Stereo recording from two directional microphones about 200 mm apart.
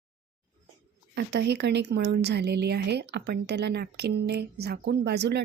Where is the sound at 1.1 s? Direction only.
55° right (ahead or behind).